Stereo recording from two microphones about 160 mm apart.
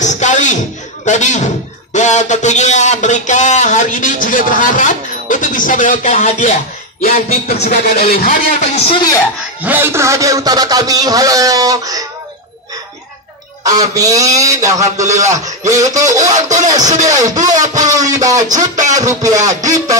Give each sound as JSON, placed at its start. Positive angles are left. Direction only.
{"t": 0.0, "sound": "a sound", "side_deg": 50}
{"t": 1.0, "sound": "speech", "side_deg": 50}
{"t": 7.6, "sound": "speech", "side_deg": 75}
{"t": 9.6, "sound": "a man's voice", "side_deg": -10}
{"t": 13.7, "sound": "a man's voice", "side_deg": -20}
{"t": 16.3, "sound": "speech", "side_deg": -50}
{"t": 17.0, "sound": "a man's voice", "side_deg": -20}
{"t": 18.6, "sound": "speech", "side_deg": -50}
{"t": 18.9, "sound": "a man's voice", "side_deg": -20}